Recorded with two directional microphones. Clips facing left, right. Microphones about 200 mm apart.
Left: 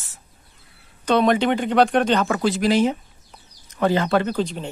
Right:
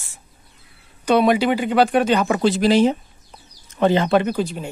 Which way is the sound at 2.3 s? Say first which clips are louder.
Right 3 dB; 30° right (ahead or behind).